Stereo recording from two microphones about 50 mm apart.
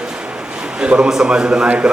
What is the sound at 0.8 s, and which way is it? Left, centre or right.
Speech, right.